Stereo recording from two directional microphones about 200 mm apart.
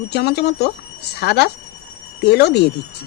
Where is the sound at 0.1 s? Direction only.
55° left (ahead or behind).